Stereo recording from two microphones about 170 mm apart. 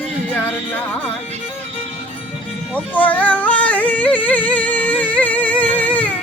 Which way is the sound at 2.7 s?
10° left (ahead or behind).